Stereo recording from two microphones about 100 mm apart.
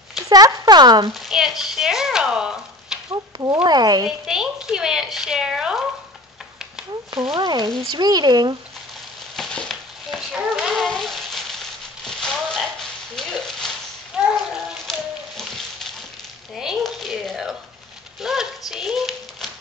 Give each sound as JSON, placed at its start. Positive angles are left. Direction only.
{"t": 0.3, "sound": "speech", "side_deg": -45}
{"t": 1.1, "sound": "speech", "side_deg": -5}
{"t": 3.1, "sound": "speech", "side_deg": -40}
{"t": 4.3, "sound": "speech", "side_deg": -5}
{"t": 7.3, "sound": "speech", "side_deg": -45}
{"t": 9.4, "sound": "sizzle", "side_deg": 5}
{"t": 12.0, "sound": "a sound", "side_deg": 5}
{"t": 14.1, "sound": "a sound", "side_deg": -5}